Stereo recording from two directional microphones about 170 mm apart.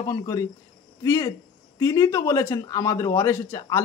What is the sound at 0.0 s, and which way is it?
Speech, 20° left (ahead or behind).